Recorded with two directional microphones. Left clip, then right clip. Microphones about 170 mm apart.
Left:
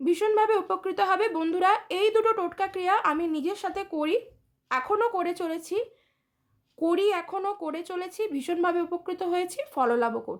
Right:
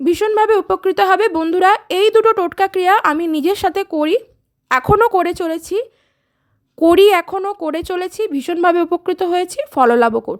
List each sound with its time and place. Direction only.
0.0 s speech: 45° right (ahead or behind)
6.7 s a child's voice: 55° right (ahead or behind)
7.3 s speech: 40° right (ahead or behind)